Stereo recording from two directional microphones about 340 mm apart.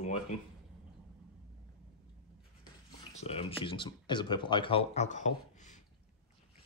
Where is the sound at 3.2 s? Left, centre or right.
Centre.